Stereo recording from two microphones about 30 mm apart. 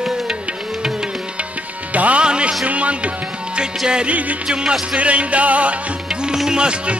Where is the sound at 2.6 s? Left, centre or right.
Right.